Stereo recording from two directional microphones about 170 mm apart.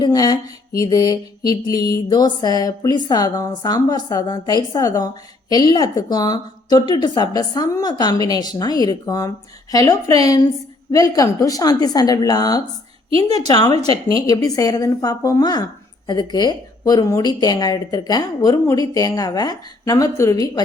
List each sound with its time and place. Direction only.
0.0 s mantra: 20° left (ahead or behind)